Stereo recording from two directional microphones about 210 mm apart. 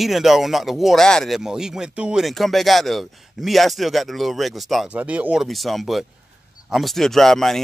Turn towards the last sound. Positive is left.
turn(degrees=0)  # may be behind; listen again after turning